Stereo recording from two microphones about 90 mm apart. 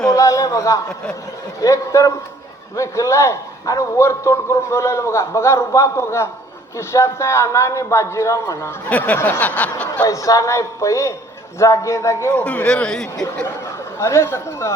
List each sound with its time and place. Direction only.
0.1 s a man's voice: 40° left (ahead or behind)
8.9 s snicker: 15° left (ahead or behind)
10.1 s a man's voice: 40° left (ahead or behind)
12.3 s snicker: 15° left (ahead or behind)
13.4 s speech: 35° left (ahead or behind)